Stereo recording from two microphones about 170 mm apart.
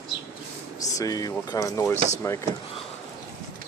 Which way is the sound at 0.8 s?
20° left (ahead or behind).